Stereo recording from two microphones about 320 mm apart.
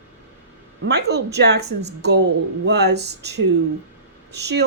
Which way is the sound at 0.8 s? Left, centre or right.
Right.